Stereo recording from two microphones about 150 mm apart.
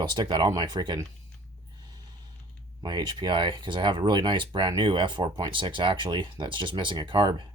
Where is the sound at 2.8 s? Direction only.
30° right (ahead or behind).